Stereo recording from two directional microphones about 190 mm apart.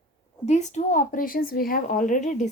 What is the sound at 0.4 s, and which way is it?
A woman's voice, 35° left (ahead or behind).